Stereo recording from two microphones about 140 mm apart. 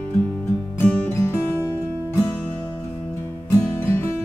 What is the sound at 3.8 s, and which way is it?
Music, 15° left (ahead or behind).